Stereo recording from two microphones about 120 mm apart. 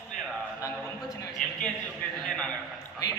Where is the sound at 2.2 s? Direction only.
5° left (ahead or behind).